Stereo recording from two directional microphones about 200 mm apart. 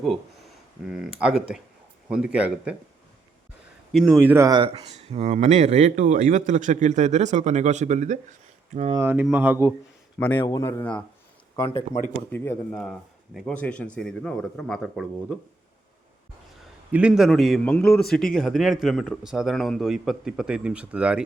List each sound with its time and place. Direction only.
0.9 s speech: 5° right (ahead or behind)
3.9 s speech: 5° right (ahead or behind); by 8.2 s 35° right (ahead or behind)
8.9 s speech: 10° right (ahead or behind)
10.2 s a man's voice: 10° left (ahead or behind)
11.7 s speech: 40° left (ahead or behind)
12.3 s speech: 5° left (ahead or behind)
16.9 s speech: 5° right (ahead or behind)